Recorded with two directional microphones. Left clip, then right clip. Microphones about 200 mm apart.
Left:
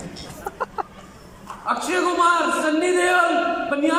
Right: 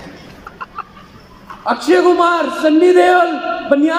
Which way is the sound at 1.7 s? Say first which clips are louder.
Right 10 dB; 35° right (ahead or behind).